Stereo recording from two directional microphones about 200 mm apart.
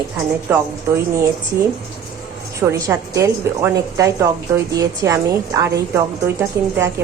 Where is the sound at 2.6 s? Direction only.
15° right (ahead or behind).